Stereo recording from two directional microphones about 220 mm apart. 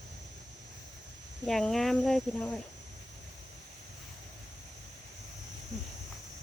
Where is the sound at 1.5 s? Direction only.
Centre (ahead or behind).